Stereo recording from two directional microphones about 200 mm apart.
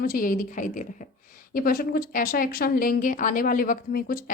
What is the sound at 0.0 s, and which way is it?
A woman's voice, 45° left (ahead or behind).